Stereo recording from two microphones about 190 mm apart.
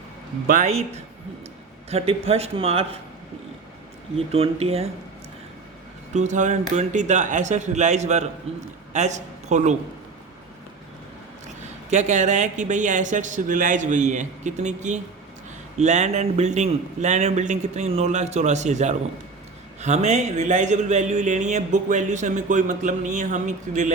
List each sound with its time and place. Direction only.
0.4 s speech: 40° right (ahead or behind)
4.3 s speech: 30° right (ahead or behind)
6.1 s speech: 40° right (ahead or behind)
11.4 s speech: 35° right (ahead or behind)